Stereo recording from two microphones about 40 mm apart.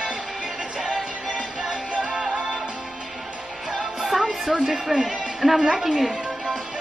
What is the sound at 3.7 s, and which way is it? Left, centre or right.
Music, centre.